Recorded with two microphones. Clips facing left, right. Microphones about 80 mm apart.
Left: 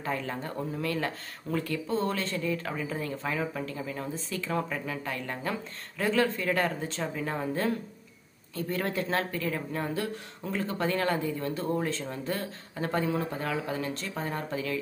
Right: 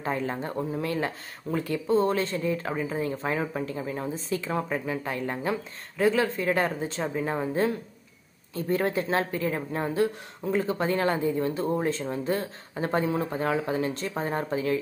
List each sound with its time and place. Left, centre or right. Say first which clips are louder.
0.0 s speech: right 4 dB; right